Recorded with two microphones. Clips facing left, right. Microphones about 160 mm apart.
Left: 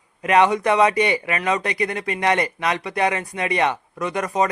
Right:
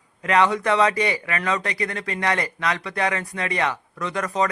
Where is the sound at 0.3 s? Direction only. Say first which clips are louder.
Left 3 dB; 20° left (ahead or behind).